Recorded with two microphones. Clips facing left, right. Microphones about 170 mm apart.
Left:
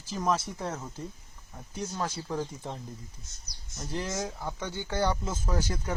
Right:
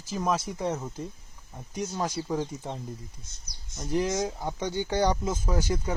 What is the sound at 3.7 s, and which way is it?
Speech, 15° right (ahead or behind).